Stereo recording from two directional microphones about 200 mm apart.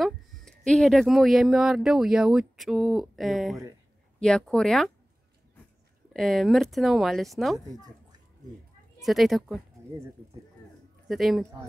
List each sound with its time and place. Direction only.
0.0 s speech: centre (ahead or behind)
6.1 s speech: centre (ahead or behind)
7.5 s speech: 20° right (ahead or behind)
9.0 s speech: centre (ahead or behind)
11.1 s speech: centre (ahead or behind)